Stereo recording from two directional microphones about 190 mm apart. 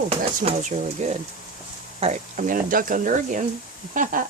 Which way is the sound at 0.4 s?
40° right (ahead or behind).